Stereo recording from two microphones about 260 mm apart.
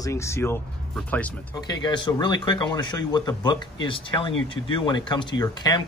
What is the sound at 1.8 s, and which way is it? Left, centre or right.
Speech, centre.